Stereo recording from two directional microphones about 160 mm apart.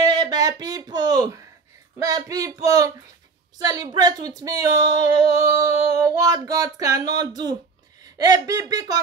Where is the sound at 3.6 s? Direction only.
25° right (ahead or behind).